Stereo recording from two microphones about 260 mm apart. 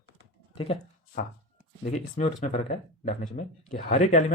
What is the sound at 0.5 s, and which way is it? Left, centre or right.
Speech, left.